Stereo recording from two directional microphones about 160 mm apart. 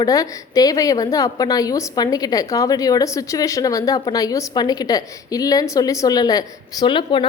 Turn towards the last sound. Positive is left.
turn(degrees=30)  # may be behind; listen again after turning